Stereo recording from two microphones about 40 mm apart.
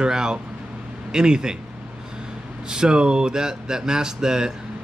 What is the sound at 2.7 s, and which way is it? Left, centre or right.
Speech, right.